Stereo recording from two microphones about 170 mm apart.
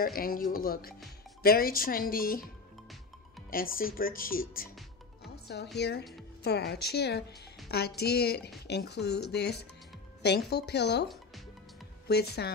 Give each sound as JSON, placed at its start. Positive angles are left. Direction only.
{"t": 0.0, "sound": "speech", "side_deg": 60}
{"t": 3.4, "sound": "speech", "side_deg": 55}
{"t": 5.3, "sound": "music", "side_deg": 75}
{"t": 5.8, "sound": "speech", "side_deg": 75}
{"t": 12.1, "sound": "speech", "side_deg": 70}